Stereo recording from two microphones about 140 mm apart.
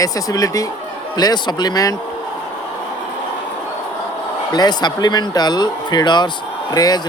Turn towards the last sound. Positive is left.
turn(degrees=25)  # may be behind; listen again after turning